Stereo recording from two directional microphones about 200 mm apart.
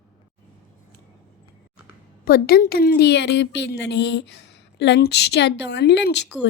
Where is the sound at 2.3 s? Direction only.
50° left (ahead or behind).